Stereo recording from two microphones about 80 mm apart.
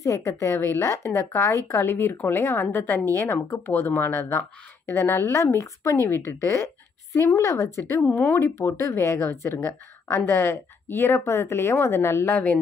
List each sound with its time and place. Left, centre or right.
0.0 s speech: left
8.0 s speech: left
8.4 s speech: left